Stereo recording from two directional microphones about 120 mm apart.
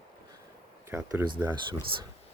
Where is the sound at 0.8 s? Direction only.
20° right (ahead or behind).